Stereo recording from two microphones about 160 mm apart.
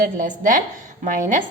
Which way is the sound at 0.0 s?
55° right (ahead or behind).